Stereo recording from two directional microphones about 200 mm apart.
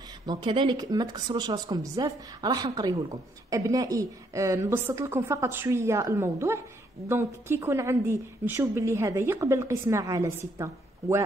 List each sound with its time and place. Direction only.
0.3 s a woman's voice: 25° right (ahead or behind)